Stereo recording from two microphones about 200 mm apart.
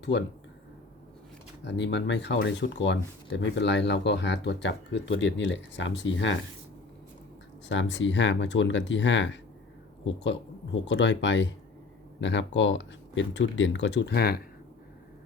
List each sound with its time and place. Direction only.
0.0 s speech: 60° left (ahead or behind)
1.6 s speech: 60° left (ahead or behind)
7.7 s speech: 65° left (ahead or behind)